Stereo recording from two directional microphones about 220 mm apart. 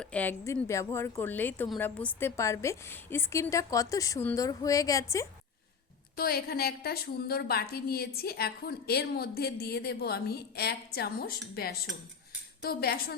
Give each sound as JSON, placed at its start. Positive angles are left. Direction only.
{"t": 0.0, "sound": "a woman's voice", "side_deg": 5}
{"t": 6.1, "sound": "a woman's voice", "side_deg": 45}